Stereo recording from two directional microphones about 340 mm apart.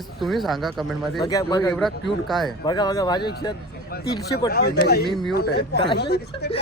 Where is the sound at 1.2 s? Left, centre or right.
Centre.